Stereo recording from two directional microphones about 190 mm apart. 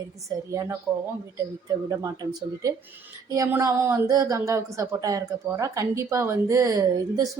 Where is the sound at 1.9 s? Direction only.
15° right (ahead or behind).